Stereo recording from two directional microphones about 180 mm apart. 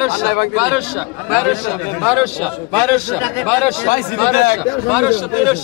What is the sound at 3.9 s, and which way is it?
Speech, 55° left (ahead or behind).